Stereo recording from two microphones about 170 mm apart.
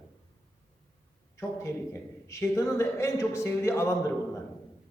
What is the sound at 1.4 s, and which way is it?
A man's voice, 15° left (ahead or behind).